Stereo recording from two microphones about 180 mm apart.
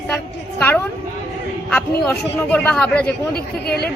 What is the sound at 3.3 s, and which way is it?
Speech, 60° left (ahead or behind).